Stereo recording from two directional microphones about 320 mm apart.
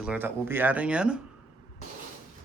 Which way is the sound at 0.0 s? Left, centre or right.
Centre.